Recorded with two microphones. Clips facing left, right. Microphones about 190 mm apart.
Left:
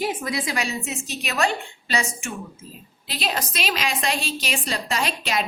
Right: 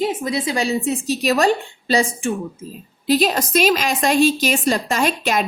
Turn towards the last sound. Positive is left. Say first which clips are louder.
# right 6 dB
turn(degrees=-50)  # may be behind; listen again after turning